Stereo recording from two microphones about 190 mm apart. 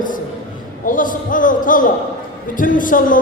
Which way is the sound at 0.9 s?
45° left (ahead or behind).